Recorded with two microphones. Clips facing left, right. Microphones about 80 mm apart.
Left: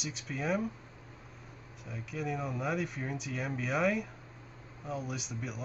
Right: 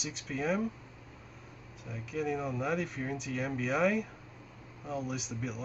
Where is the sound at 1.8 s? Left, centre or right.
Centre.